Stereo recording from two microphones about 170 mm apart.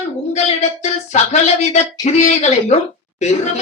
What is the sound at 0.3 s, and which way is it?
Speech, 40° left (ahead or behind).